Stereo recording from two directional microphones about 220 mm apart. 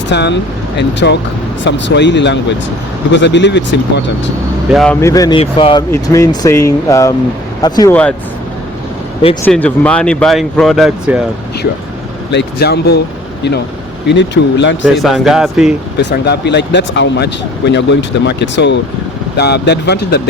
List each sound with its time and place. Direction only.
0.1 s speech: 50° left (ahead or behind)
4.7 s speech: centre (ahead or behind)
4.9 s speech: 15° left (ahead or behind)
9.4 s speech: 5° left (ahead or behind)
12.3 s speech: 50° left (ahead or behind)
14.1 s speech: 55° left (ahead or behind)
14.8 s speech: centre (ahead or behind)
16.0 s speech: 50° left (ahead or behind)